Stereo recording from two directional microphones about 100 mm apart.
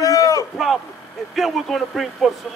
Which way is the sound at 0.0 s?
35° left (ahead or behind).